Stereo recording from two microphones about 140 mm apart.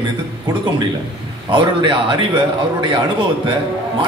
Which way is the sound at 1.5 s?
35° right (ahead or behind).